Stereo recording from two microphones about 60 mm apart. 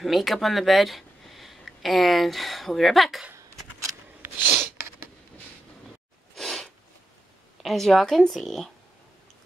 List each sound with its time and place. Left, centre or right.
0.0 s speech: centre
4.6 s a sound: right
6.3 s sneeze: centre
7.6 s a woman's voice: centre